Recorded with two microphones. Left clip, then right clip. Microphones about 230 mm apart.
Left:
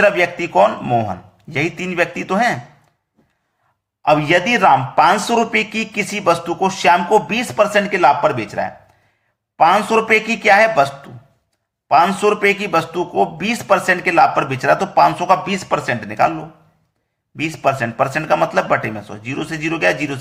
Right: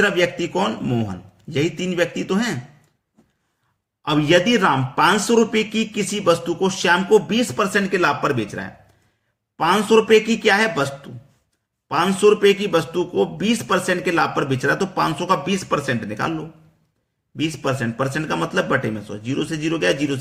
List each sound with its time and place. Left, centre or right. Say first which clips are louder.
0.0 s a man's voice: left 4 dB; centre
4.2 s a man's voice: left 2 dB; centre
17.4 s a man's voice: left 5 dB; centre